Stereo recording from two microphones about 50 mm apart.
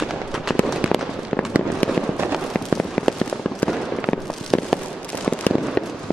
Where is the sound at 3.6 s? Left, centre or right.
Left.